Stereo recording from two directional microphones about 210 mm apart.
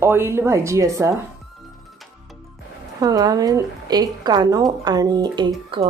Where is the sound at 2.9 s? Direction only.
20° right (ahead or behind).